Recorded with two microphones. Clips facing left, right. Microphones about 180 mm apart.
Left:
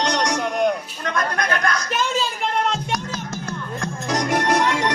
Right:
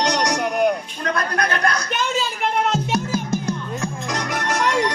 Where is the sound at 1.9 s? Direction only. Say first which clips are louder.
Even; centre (ahead or behind).